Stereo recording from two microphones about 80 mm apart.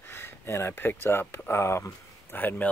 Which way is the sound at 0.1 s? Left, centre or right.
Left.